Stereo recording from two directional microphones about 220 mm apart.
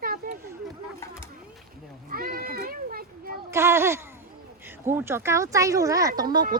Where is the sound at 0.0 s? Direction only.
40° right (ahead or behind).